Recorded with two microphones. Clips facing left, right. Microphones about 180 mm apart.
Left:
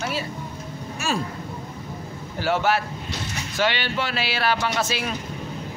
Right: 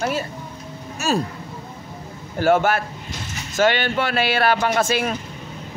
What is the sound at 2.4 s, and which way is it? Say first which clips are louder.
Speech: right 5 dB; 50° right (ahead or behind).